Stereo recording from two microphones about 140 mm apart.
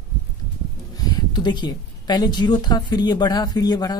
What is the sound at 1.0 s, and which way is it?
Speech, 30° left (ahead or behind).